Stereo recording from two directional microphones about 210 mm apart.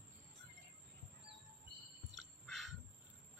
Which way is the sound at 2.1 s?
Centre (ahead or behind).